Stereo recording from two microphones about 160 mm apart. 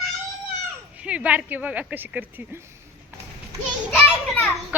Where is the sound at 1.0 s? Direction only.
5° right (ahead or behind).